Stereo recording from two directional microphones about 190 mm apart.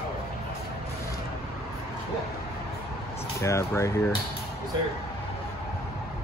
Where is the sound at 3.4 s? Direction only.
15° left (ahead or behind).